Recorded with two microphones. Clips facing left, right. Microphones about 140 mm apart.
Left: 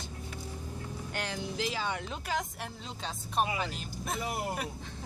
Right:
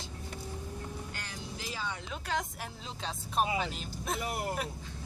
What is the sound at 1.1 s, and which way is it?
Speech, 85° left.